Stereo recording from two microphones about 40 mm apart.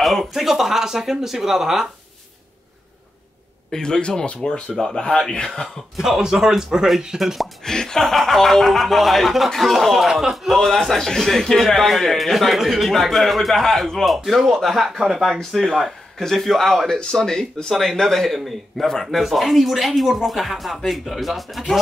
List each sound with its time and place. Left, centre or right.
0.0 s a sound: centre
0.3 s a man's voice: centre
3.7 s a man's voice: centre
5.9 s a man's voice: centre
7.6 s a man's voice: centre